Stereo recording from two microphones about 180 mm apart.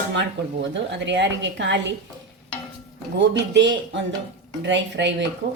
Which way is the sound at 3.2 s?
75° right (ahead or behind).